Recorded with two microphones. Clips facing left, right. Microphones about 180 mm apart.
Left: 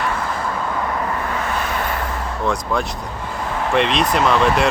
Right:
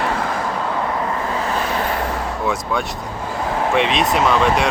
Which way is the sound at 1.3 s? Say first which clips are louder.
Right 2 dB; 35° right (ahead or behind).